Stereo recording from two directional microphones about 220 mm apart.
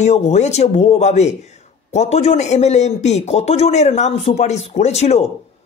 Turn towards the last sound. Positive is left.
turn(degrees=30)  # may be behind; listen again after turning